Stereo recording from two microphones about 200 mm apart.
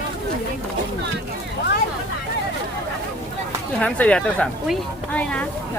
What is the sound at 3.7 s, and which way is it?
Speech, 5° left (ahead or behind).